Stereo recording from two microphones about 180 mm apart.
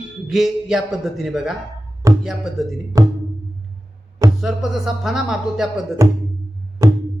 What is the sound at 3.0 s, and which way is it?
Music, 15° right (ahead or behind).